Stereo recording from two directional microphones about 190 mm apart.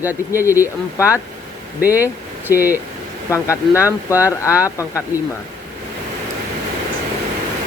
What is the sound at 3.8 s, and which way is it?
Speech, 10° right (ahead or behind).